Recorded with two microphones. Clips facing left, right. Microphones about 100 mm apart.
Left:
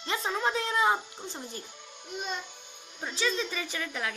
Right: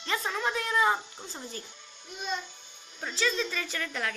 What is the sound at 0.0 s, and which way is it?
A woman's voice, 20° left (ahead or behind).